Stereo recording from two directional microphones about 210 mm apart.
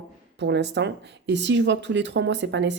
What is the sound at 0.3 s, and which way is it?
Speech, 55° right (ahead or behind).